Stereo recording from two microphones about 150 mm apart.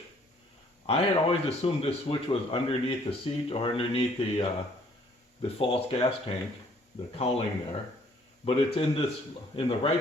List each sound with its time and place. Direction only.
0.9 s speech: 40° left (ahead or behind)
8.4 s speech: 40° left (ahead or behind)